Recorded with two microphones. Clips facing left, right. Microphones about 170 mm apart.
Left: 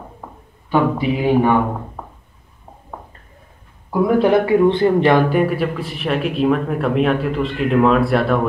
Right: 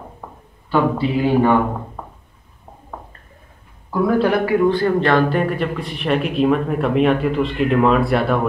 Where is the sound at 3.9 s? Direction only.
20° left (ahead or behind).